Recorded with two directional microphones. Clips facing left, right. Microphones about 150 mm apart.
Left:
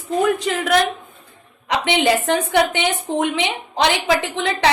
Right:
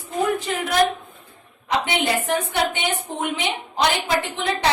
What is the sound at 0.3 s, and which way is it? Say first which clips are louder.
A woman's voice: left 2 dB; 85° left.